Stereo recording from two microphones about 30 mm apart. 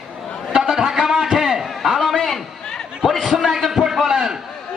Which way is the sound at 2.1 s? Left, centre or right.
Centre.